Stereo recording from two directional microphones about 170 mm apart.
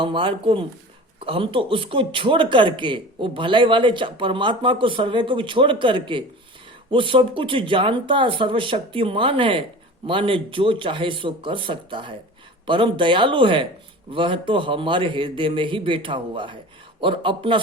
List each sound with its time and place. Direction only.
0.0 s speech: 30° right (ahead or behind)